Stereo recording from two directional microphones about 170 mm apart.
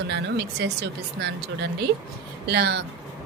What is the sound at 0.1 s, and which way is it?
A woman's voice, 85° right.